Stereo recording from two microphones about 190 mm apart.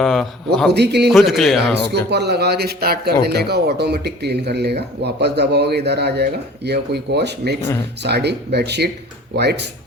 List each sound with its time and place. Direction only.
0.0 s a man's voice: 5° left (ahead or behind)
0.7 s speech: 60° right (ahead or behind)
1.1 s a man's voice: centre (ahead or behind)
1.7 s speech: 60° right (ahead or behind)